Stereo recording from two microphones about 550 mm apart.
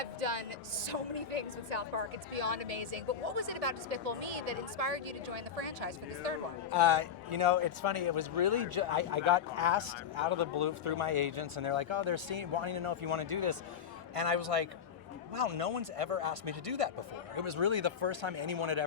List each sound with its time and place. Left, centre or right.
2.3 s speech: right
6.7 s speech: right
14.2 s speech: right
17.3 s speech: right